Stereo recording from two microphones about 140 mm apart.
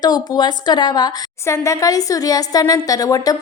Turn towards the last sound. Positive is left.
turn(degrees=25)  # may be behind; listen again after turning